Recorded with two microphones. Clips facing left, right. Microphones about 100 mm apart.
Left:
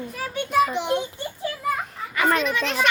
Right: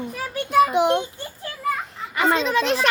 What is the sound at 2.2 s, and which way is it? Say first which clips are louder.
Speech: right 2 dB; 25° right (ahead or behind).